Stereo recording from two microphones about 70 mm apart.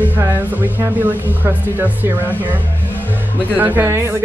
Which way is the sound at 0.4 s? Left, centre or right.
Right.